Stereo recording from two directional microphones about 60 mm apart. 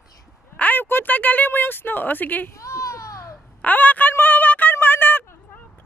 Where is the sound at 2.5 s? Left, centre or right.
Left.